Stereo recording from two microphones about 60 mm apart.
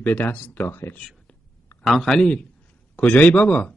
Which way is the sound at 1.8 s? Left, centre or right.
Centre.